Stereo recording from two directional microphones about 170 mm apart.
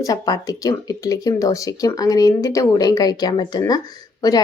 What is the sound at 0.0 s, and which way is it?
Speech, 20° left (ahead or behind).